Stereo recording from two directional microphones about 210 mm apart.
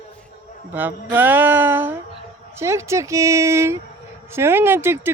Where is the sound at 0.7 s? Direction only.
10° right (ahead or behind).